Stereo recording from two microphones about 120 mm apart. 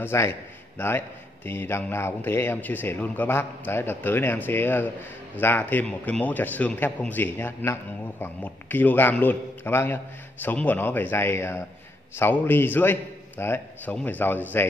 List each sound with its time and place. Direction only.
0.0 s a man's voice: 20° left (ahead or behind)